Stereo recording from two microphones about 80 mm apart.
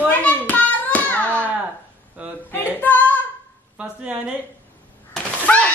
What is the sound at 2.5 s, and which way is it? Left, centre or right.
Female singing, left.